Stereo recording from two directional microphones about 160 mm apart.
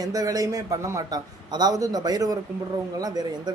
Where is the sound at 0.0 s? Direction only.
20° right (ahead or behind).